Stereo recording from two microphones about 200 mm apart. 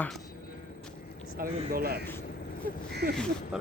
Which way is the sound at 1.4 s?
50° right (ahead or behind).